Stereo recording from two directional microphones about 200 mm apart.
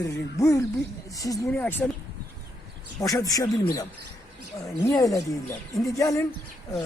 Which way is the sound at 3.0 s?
15° left (ahead or behind).